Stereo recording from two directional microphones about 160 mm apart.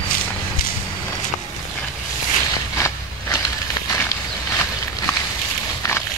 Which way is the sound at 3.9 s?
15° left (ahead or behind).